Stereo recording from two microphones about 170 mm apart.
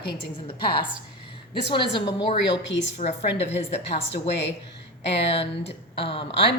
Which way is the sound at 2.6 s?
90° left.